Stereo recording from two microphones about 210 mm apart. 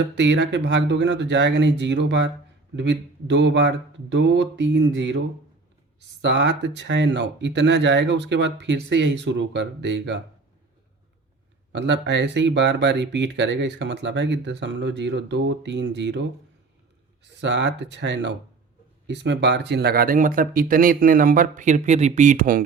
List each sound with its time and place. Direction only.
0.2 s speech: 60° right (ahead or behind)
6.2 s speech: 55° right (ahead or behind)
11.7 s speech: 55° right (ahead or behind)
17.4 s speech: 55° right (ahead or behind); by 22.6 s 40° right (ahead or behind)